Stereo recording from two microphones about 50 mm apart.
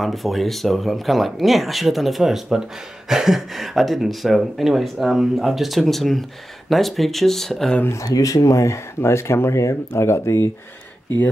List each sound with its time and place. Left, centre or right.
0.0 s speech: centre
7.9 s speech: left